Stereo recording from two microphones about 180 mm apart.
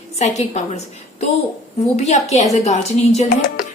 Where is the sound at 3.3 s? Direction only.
50° left (ahead or behind).